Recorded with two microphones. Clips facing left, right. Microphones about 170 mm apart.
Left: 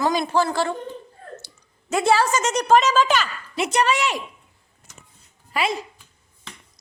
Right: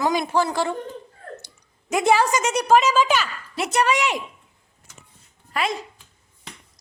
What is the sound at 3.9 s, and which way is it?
Speech, 15° right (ahead or behind).